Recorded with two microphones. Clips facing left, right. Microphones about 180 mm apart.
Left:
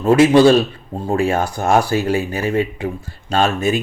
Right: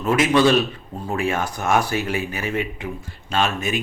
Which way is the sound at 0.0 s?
30° left (ahead or behind).